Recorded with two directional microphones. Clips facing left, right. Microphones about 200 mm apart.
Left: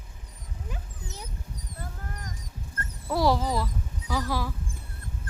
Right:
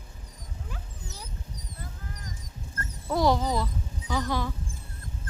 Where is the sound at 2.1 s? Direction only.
50° left (ahead or behind).